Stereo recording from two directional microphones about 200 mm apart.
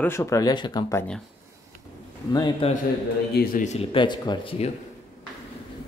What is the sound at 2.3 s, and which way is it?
Speech, 20° left (ahead or behind).